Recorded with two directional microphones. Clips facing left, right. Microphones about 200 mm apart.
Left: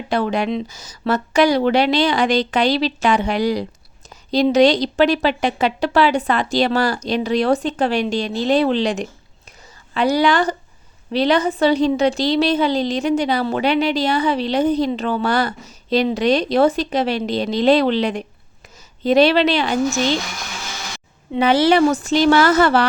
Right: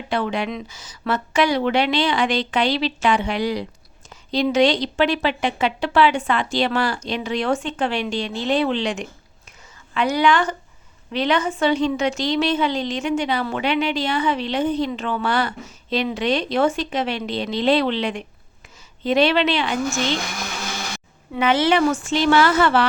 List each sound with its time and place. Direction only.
0.1 s a woman's voice: 40° left (ahead or behind)
21.3 s a woman's voice: 35° left (ahead or behind)